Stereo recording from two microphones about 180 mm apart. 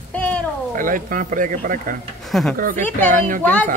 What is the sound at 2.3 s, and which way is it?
Speech, centre (ahead or behind).